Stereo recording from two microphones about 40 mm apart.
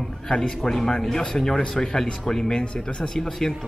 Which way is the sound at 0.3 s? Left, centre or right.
Centre.